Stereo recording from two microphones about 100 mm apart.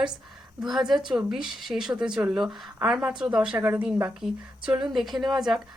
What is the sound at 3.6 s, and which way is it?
Speech, 20° right (ahead or behind).